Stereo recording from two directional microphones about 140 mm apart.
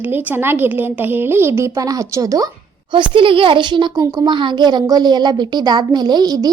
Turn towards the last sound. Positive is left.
turn(degrees=-30)  # may be behind; listen again after turning